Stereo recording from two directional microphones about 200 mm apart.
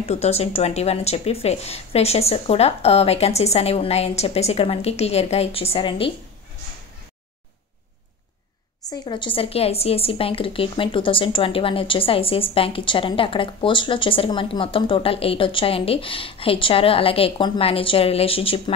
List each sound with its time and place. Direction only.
0.0 s speech: 35° left (ahead or behind)
8.8 s a woman's voice: 20° left (ahead or behind)